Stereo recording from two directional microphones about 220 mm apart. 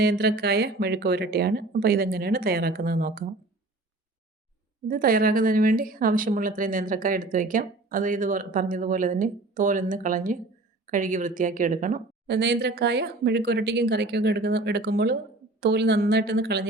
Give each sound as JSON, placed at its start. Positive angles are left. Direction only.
{"t": 0.0, "sound": "a woman's voice", "side_deg": -45}
{"t": 4.9, "sound": "a woman's voice", "side_deg": -40}